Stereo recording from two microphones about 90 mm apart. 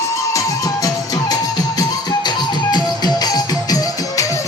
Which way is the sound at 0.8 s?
45° left (ahead or behind).